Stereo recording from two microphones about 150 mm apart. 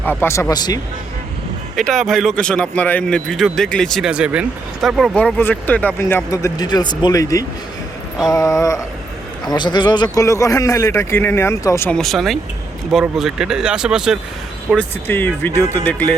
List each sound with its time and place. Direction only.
0.0 s a man's voice: 15° left (ahead or behind)
1.9 s speech: centre (ahead or behind)
5.1 s a man's voice: 10° left (ahead or behind)
11.9 s speech: 5° left (ahead or behind)
14.8 s speech: 15° left (ahead or behind)